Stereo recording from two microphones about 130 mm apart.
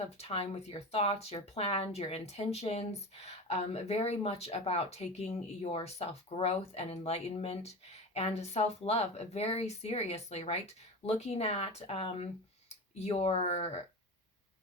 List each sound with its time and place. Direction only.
0.2 s speech: 55° left (ahead or behind)